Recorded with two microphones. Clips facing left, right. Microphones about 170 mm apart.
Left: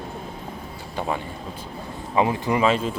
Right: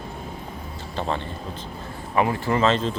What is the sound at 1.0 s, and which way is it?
Speech, 10° left (ahead or behind).